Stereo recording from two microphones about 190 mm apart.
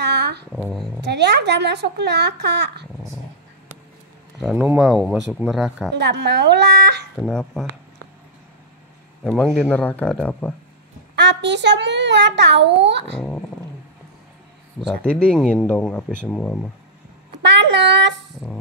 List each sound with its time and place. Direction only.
0.0 s a sound: 60° right (ahead or behind)
0.5 s speech: centre (ahead or behind)
1.0 s a child's voice: 60° right (ahead or behind)
4.4 s speech: 5° right (ahead or behind)
5.9 s a child's voice: 65° right (ahead or behind)
7.2 s speech: centre (ahead or behind)
9.2 s speech: centre (ahead or behind)
11.1 s a child's voice: 65° right (ahead or behind)
15.0 s speech: 5° left (ahead or behind)
17.4 s a sound: 65° right (ahead or behind)